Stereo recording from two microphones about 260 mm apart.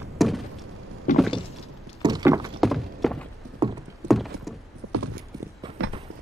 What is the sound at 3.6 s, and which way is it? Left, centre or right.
Clip-clop, centre.